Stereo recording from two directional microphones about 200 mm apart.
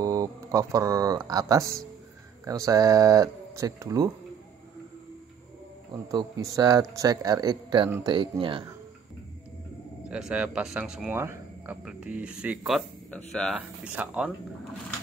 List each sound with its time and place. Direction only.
0.0 s speech: 15° right (ahead or behind)
6.1 s a man's voice: 15° right (ahead or behind)
10.0 s speech: 5° right (ahead or behind)